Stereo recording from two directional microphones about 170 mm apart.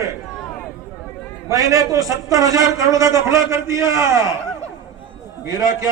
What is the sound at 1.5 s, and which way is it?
A man's voice, 20° right (ahead or behind).